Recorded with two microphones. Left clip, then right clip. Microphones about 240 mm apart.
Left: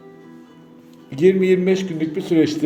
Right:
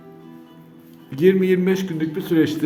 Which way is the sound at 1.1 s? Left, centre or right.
Centre.